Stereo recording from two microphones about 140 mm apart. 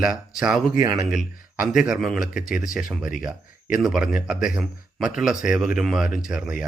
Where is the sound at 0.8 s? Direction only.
20° right (ahead or behind).